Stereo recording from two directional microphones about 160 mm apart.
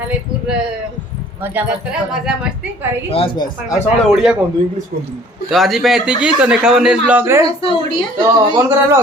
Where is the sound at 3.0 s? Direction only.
35° left (ahead or behind).